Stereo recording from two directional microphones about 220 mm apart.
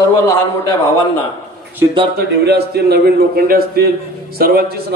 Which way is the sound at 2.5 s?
45° right (ahead or behind).